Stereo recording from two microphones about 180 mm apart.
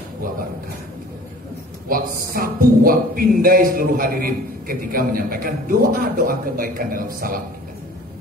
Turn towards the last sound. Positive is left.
turn(degrees=-50)  # may be behind; listen again after turning